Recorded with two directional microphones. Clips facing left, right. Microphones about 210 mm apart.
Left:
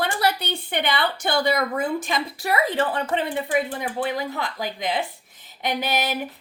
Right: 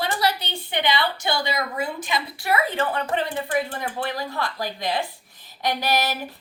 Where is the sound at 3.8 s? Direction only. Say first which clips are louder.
Left 2 dB; 20° left (ahead or behind).